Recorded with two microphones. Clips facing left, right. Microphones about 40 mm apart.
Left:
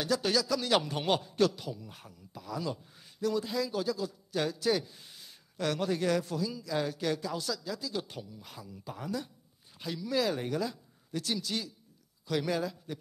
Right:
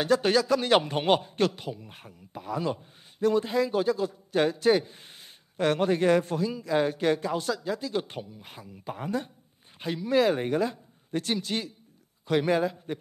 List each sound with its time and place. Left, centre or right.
0.0 s a man's voice: right